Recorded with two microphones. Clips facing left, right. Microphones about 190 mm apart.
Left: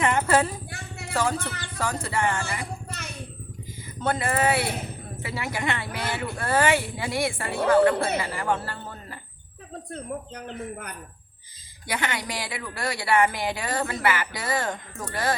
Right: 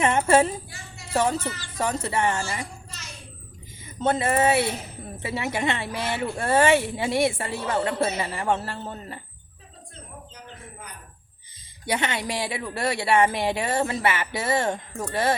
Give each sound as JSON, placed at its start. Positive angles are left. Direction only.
{"t": 0.0, "sound": "a sound", "side_deg": -25}
{"t": 0.7, "sound": "a sound", "side_deg": 60}
{"t": 1.1, "sound": "speech", "side_deg": -25}
{"t": 1.4, "sound": "speech", "side_deg": 60}
{"t": 1.8, "sound": "speech", "side_deg": -25}
{"t": 2.8, "sound": "a sound", "side_deg": 60}
{"t": 4.0, "sound": "speech", "side_deg": -25}
{"t": 9.9, "sound": "speech", "side_deg": 65}
{"t": 11.9, "sound": "speech", "side_deg": -25}